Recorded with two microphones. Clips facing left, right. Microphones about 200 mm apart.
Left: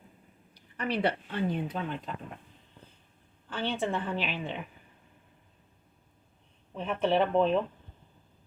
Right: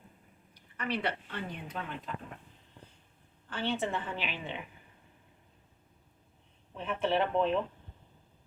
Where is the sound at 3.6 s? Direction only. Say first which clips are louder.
Left 2 dB; 15° left (ahead or behind).